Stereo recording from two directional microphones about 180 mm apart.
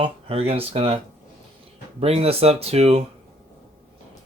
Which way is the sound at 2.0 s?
35° right (ahead or behind).